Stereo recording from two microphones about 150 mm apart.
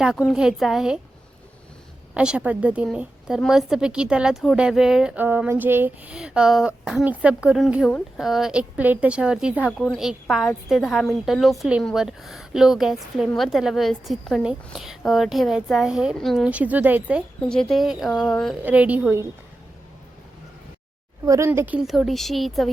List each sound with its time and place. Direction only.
0.0 s a woman's voice: 5° right (ahead or behind)
2.1 s a woman's voice: 5° right (ahead or behind)
9.7 s a woman's voice: 5° left (ahead or behind)
16.5 s a woman's voice: 10° right (ahead or behind)
17.5 s a woman's voice: 5° left (ahead or behind)
18.6 s a woman's voice: 10° right (ahead or behind)
21.2 s a woman's voice: 20° right (ahead or behind)
21.8 s a woman's voice: centre (ahead or behind)